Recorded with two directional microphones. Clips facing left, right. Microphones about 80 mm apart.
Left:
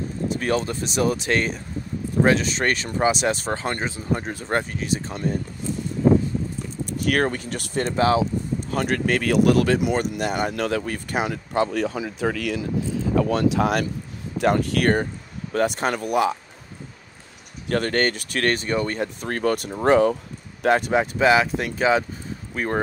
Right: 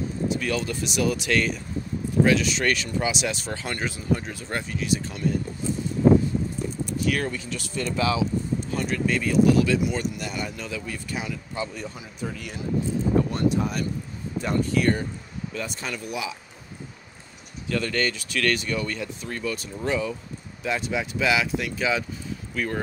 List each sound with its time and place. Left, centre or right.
0.3 s speech: left
6.9 s speech: left
17.6 s speech: left
19.2 s speech: left